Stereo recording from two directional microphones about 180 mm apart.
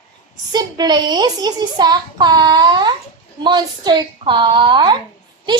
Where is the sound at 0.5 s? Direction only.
25° right (ahead or behind).